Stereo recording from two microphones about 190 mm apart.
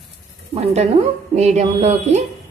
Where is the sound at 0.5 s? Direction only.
35° right (ahead or behind).